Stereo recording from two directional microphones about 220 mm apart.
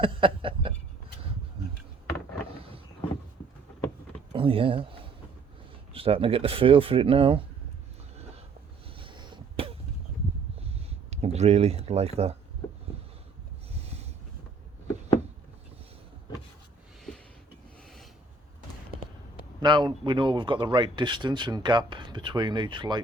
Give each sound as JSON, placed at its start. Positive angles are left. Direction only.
{"t": 0.0, "sound": "speech", "side_deg": -25}
{"t": 4.3, "sound": "speech", "side_deg": -25}
{"t": 5.9, "sound": "speech", "side_deg": -25}
{"t": 9.0, "sound": "a sound", "side_deg": -20}
{"t": 10.8, "sound": "a sound", "side_deg": -30}
{"t": 19.5, "sound": "speech", "side_deg": -20}